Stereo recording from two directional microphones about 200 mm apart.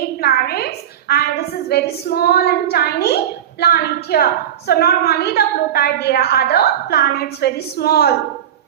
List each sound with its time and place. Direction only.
0.2 s a woman's voice: 50° left (ahead or behind)